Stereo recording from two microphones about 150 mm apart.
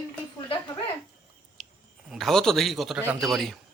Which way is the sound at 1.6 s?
5° left (ahead or behind).